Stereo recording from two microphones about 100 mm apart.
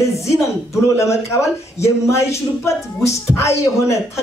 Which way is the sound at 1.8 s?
30° left (ahead or behind).